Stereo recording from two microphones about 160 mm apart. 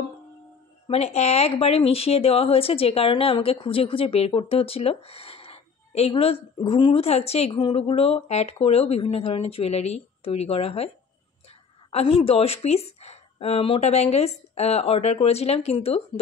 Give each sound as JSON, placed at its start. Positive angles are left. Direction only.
{"t": 0.8, "sound": "speech", "side_deg": 40}
{"t": 11.9, "sound": "speech", "side_deg": 40}